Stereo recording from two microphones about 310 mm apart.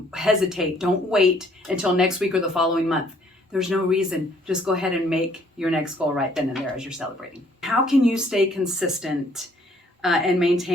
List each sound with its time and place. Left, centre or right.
0.1 s speech: centre